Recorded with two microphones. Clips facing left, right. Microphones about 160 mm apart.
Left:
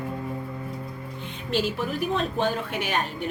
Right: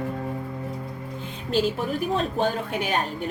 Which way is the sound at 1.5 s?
40° right (ahead or behind).